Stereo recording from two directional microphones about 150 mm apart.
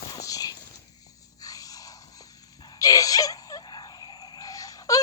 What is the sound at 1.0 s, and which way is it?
Dog, 25° left (ahead or behind).